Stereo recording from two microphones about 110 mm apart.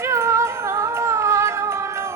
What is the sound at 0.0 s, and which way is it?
Music, 25° right (ahead or behind).